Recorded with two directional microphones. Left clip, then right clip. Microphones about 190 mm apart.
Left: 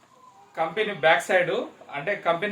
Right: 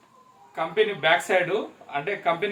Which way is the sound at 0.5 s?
20° left (ahead or behind).